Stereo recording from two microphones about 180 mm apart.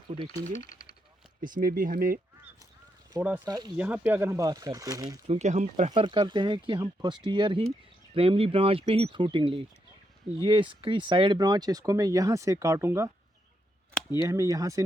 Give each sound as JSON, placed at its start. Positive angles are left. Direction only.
{"t": 0.6, "sound": "a sound", "side_deg": 50}
{"t": 1.4, "sound": "speech", "side_deg": -50}
{"t": 3.2, "sound": "speech", "side_deg": -10}
{"t": 3.4, "sound": "speech", "side_deg": -25}
{"t": 3.8, "sound": "speech", "side_deg": -10}
{"t": 5.3, "sound": "speech", "side_deg": -40}
{"t": 5.9, "sound": "speech", "side_deg": -25}
{"t": 14.2, "sound": "speech", "side_deg": -20}